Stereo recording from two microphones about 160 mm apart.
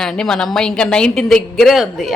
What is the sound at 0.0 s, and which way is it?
A woman's voice, 5° left (ahead or behind).